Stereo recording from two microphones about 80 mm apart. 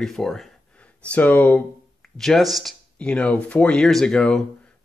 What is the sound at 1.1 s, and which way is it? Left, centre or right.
Speech, left.